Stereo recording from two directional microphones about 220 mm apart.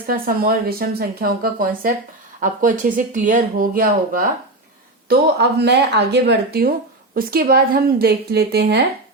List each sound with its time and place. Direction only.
0.1 s speech: 40° right (ahead or behind)